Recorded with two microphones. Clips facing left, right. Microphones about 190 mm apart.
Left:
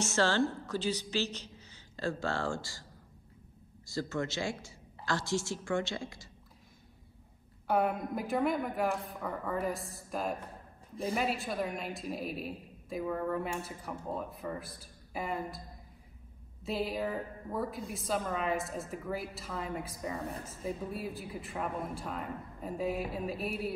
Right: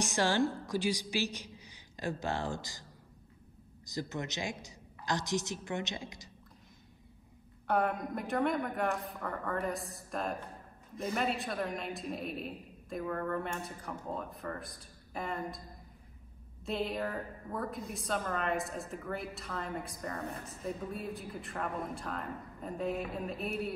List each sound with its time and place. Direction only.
0.0 s a woman's voice: 15° right (ahead or behind)
3.8 s a woman's voice: 15° right (ahead or behind)
7.6 s a woman's voice: 5° left (ahead or behind)
16.6 s a woman's voice: centre (ahead or behind)